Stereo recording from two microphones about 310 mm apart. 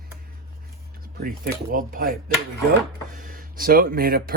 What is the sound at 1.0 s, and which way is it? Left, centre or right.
Speech, right.